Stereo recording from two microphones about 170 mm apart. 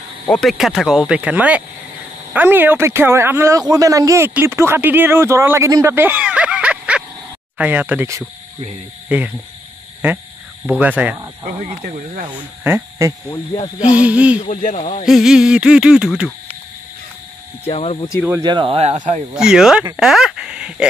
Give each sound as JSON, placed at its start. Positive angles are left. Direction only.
{"t": 0.3, "sound": "speech", "side_deg": 0}
{"t": 10.7, "sound": "speech", "side_deg": -10}
{"t": 12.6, "sound": "speech", "side_deg": -15}
{"t": 14.4, "sound": "speech", "side_deg": 45}
{"t": 15.0, "sound": "speech", "side_deg": 0}
{"t": 17.6, "sound": "speech", "side_deg": 40}
{"t": 18.4, "sound": "speech", "side_deg": -25}
{"t": 19.3, "sound": "speech", "side_deg": -5}